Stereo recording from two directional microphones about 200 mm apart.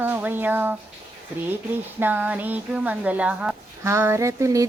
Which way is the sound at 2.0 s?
10° right (ahead or behind).